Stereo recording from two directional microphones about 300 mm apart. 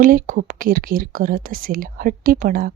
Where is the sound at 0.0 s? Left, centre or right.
Right.